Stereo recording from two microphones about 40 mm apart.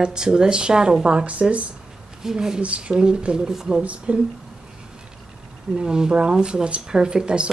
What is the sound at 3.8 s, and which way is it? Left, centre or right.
Speech, right.